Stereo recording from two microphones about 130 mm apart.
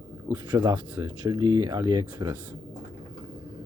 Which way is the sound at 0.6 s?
25° right (ahead or behind).